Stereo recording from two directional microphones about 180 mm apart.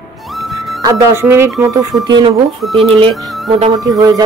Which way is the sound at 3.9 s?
20° right (ahead or behind).